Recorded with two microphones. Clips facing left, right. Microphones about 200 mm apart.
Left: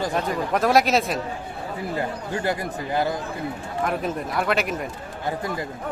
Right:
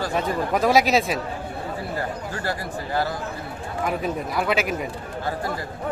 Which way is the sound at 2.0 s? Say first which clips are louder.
Left 2 dB; 20° left (ahead or behind).